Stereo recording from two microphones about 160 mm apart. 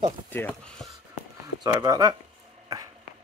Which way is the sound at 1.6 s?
25° right (ahead or behind).